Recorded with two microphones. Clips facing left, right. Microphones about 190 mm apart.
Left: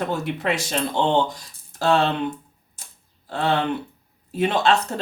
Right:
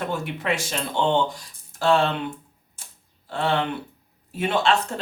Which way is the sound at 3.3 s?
40° left (ahead or behind).